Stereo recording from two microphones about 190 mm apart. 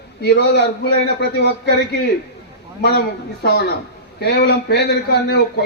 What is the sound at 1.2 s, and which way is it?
Speech, 60° left (ahead or behind).